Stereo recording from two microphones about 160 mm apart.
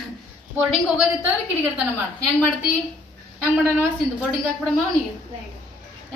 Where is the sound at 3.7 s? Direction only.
15° right (ahead or behind).